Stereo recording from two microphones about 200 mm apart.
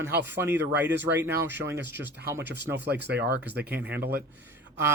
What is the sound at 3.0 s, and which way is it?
Speech, 55° right (ahead or behind).